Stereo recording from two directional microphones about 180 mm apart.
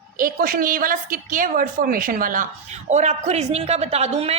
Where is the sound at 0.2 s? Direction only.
50° right (ahead or behind).